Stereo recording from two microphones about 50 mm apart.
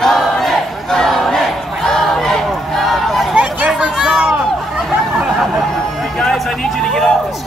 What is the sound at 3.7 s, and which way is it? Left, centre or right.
Chatter, centre.